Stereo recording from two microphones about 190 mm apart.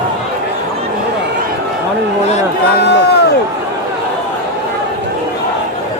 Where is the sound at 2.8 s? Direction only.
65° left (ahead or behind).